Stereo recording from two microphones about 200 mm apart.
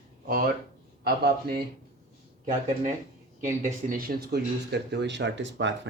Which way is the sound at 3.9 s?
50° right (ahead or behind).